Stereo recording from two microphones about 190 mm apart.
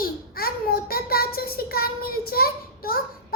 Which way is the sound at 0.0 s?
50° left (ahead or behind).